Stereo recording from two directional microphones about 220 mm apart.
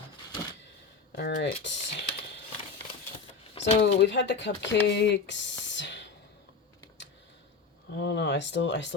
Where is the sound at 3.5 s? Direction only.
25° left (ahead or behind).